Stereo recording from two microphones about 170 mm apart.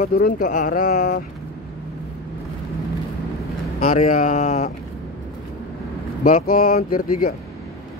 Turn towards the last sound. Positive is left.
turn(degrees=55)  # may be behind; listen again after turning